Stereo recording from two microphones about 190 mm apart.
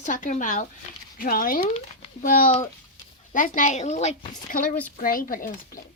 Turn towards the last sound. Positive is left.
turn(degrees=45)  # may be behind; listen again after turning